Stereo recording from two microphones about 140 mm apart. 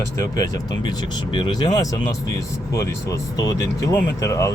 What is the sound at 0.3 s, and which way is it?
Speech, 25° left (ahead or behind).